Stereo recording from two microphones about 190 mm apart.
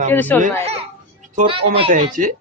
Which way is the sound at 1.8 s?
35° right (ahead or behind).